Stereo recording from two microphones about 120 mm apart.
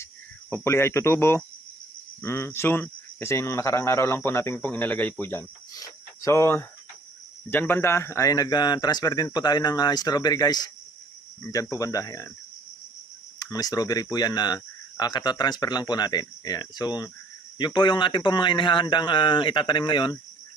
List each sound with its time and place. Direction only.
0.5 s speech: 20° left (ahead or behind)
13.4 s speech: 35° left (ahead or behind)